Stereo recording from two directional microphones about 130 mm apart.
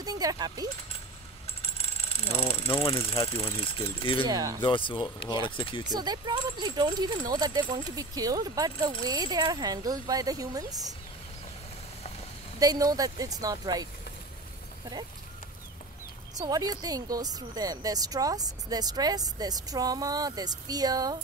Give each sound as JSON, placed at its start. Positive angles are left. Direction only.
{"t": 0.0, "sound": "speech", "side_deg": -30}
{"t": 1.6, "sound": "speech", "side_deg": 50}
{"t": 4.3, "sound": "speech", "side_deg": -30}
{"t": 4.6, "sound": "speech", "side_deg": 40}
{"t": 5.9, "sound": "speech", "side_deg": -30}
{"t": 12.5, "sound": "speech", "side_deg": -30}
{"t": 16.3, "sound": "speech", "side_deg": -30}